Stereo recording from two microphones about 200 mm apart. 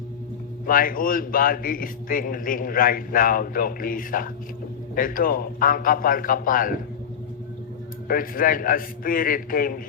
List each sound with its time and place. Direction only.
0.7 s a man's voice: 45° left (ahead or behind)
8.0 s a man's voice: 45° left (ahead or behind)